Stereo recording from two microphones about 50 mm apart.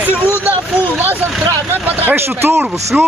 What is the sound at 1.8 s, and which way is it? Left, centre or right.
Speech, right.